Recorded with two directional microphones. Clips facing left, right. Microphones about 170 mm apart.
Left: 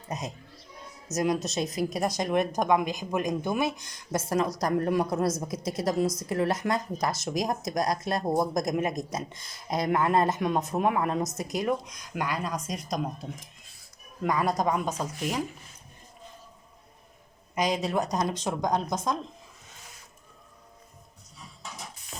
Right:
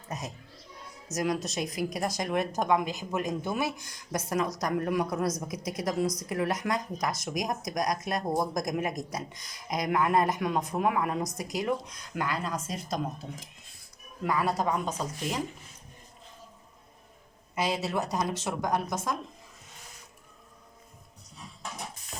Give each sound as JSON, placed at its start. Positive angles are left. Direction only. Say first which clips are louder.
{"t": 0.1, "sound": "a woman's voice", "louder": "left 3 dB", "side_deg": 20}
{"t": 12.5, "sound": "speech", "louder": "left 1 dB", "side_deg": -25}
{"t": 14.3, "sound": "speech", "louder": "left 2 dB", "side_deg": 20}
{"t": 17.6, "sound": "speech", "louder": "left 3 dB", "side_deg": 15}